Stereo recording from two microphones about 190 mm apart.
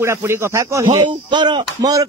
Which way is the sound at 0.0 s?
15° right (ahead or behind).